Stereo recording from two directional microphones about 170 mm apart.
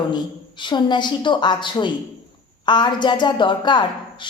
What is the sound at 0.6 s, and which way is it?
Speech, 25° left (ahead or behind).